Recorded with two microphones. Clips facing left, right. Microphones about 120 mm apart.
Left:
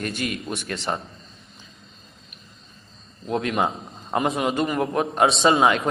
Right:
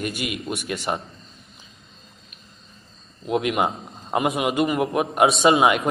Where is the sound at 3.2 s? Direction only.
15° right (ahead or behind).